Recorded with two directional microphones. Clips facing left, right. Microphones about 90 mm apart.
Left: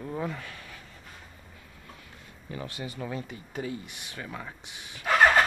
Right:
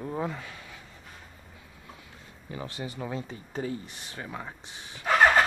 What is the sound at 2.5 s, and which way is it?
Speech, 25° right (ahead or behind).